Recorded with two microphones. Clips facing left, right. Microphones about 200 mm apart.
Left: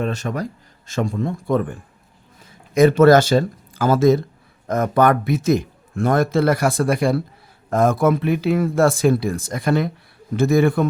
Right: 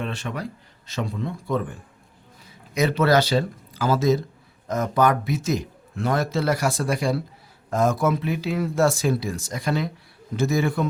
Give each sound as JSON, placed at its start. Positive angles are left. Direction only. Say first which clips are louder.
{"t": 0.0, "sound": "speech", "louder": "left 6 dB", "side_deg": 45}
{"t": 2.7, "sound": "a man's voice", "louder": "left 8 dB", "side_deg": 50}